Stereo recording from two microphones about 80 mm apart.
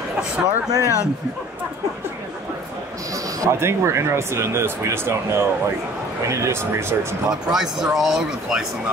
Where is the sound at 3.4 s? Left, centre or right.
Right.